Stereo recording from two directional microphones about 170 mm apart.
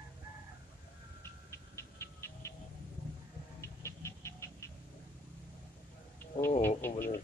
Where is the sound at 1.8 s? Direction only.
15° left (ahead or behind).